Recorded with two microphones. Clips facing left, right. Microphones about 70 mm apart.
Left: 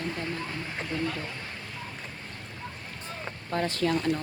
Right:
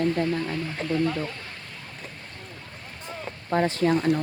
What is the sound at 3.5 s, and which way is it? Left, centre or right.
Speech, right.